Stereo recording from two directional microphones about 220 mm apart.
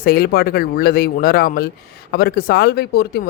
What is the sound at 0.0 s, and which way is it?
Speech, 45° left (ahead or behind).